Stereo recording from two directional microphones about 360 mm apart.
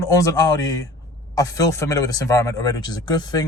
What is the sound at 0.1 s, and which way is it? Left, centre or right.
Speech, centre.